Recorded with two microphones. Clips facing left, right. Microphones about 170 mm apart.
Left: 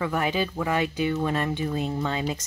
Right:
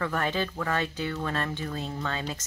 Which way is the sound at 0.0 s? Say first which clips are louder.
Left 3 dB; 10° left (ahead or behind).